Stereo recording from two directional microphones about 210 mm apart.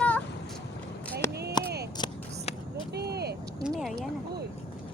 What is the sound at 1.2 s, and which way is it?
Speech, 10° left (ahead or behind).